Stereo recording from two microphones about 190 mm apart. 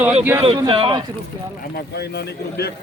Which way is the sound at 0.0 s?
10° right (ahead or behind).